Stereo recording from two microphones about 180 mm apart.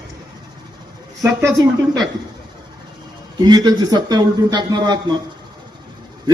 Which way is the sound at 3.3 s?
25° right (ahead or behind).